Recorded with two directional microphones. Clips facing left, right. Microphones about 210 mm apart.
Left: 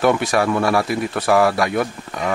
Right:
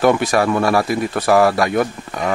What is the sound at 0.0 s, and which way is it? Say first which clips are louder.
Speech: right 2 dB; 45° right (ahead or behind).